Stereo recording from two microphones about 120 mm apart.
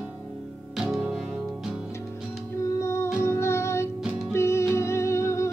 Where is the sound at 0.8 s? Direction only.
5° right (ahead or behind).